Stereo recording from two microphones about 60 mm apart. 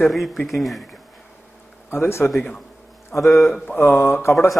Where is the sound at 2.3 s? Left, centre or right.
Centre.